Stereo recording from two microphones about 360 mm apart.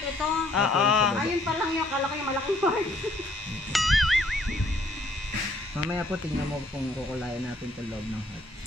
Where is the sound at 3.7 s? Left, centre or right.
Centre.